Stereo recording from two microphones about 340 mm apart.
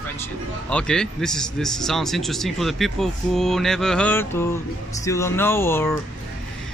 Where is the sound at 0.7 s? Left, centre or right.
Centre.